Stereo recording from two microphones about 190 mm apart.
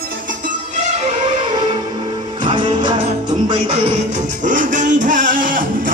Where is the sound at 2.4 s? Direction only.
25° right (ahead or behind).